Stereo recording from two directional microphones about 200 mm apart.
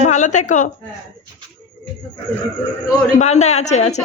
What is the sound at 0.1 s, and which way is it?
Speech, 35° left (ahead or behind).